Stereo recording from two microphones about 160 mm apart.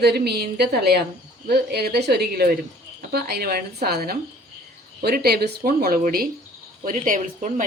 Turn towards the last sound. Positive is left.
turn(degrees=-55)  # may be behind; listen again after turning